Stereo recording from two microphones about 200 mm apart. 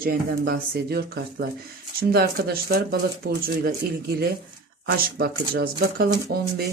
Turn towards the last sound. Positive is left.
turn(degrees=-55)  # may be behind; listen again after turning